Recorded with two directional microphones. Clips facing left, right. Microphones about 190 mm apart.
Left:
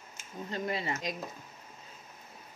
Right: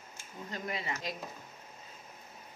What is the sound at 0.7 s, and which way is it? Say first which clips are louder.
Speech: left 3 dB; 35° left (ahead or behind).